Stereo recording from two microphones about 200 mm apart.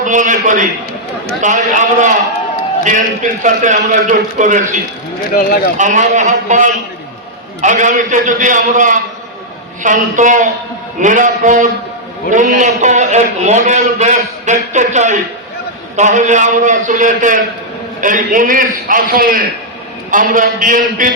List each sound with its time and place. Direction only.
0.0 s a man's voice: 40° right (ahead or behind)
3.4 s a man's voice: 40° right (ahead or behind)
5.3 s speech: 45° left (ahead or behind)
5.7 s a man's voice: 40° right (ahead or behind)